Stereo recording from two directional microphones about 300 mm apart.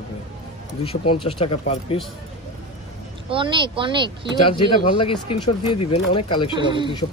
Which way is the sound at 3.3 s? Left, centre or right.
Centre.